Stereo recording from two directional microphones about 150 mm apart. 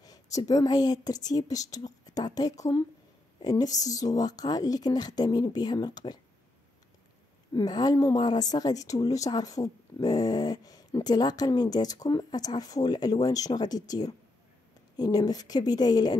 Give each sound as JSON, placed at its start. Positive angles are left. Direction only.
{"t": 0.0, "sound": "a woman's voice", "side_deg": 25}
{"t": 7.5, "sound": "a woman's voice", "side_deg": 25}